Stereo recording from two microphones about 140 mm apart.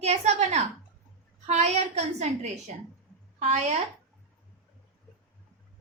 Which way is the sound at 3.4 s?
50° right (ahead or behind).